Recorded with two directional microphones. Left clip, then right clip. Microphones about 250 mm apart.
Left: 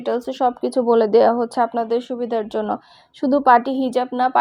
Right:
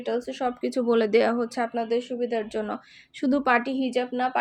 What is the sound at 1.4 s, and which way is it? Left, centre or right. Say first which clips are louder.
Speech: left 8 dB; centre.